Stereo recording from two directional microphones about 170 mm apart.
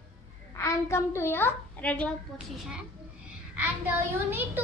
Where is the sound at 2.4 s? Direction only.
5° right (ahead or behind).